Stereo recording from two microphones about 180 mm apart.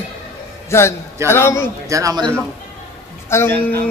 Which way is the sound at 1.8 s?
20° right (ahead or behind).